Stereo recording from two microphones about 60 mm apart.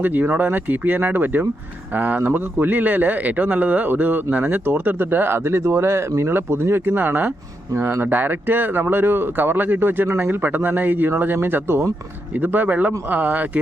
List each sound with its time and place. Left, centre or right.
0.0 s speech: right